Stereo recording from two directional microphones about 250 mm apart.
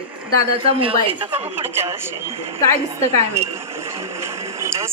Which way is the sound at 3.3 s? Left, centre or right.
Centre.